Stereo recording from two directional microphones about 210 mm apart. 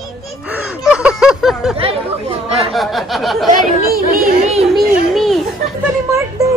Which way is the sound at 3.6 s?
45° right (ahead or behind).